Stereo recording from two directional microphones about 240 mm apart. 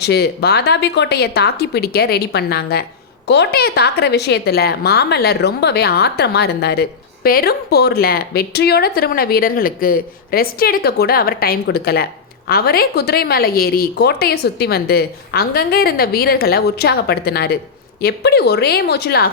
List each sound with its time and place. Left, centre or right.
0.0 s a woman's voice: left